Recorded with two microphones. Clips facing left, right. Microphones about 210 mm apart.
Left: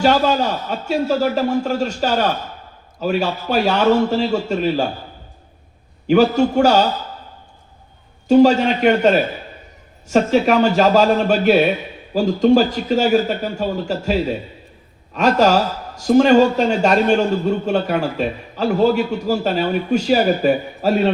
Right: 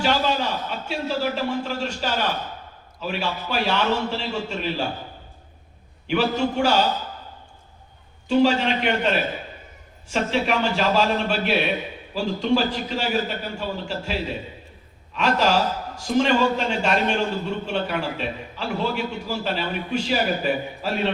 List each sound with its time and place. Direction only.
0.0 s a man's voice: 45° left (ahead or behind)
6.1 s a man's voice: 40° left (ahead or behind)
8.3 s a man's voice: 45° left (ahead or behind)